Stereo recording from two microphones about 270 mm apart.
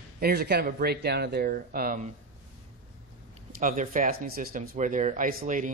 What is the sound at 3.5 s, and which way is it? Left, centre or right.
Speech, right.